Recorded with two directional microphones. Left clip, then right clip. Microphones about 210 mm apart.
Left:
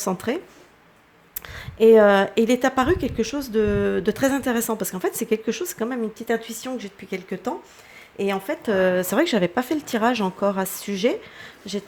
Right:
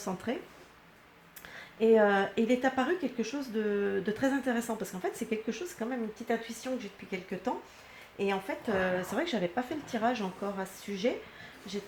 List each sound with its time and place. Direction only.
0.0 s a woman's voice: 50° left (ahead or behind)
1.4 s a woman's voice: 50° left (ahead or behind)